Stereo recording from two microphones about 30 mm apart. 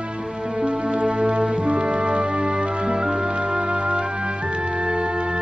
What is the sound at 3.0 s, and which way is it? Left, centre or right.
Music, centre.